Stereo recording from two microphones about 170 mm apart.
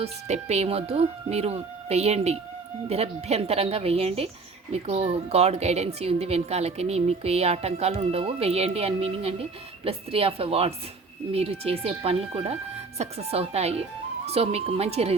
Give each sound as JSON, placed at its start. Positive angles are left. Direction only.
{"t": 0.0, "sound": "a woman's voice", "side_deg": -40}